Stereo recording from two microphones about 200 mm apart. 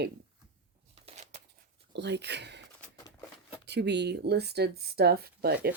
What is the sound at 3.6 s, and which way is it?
Speech, 60° right (ahead or behind).